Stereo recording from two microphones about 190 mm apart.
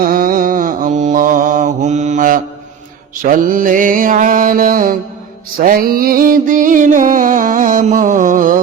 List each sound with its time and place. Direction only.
0.0 s mantra: 45° right (ahead or behind)
3.2 s music: 45° right (ahead or behind)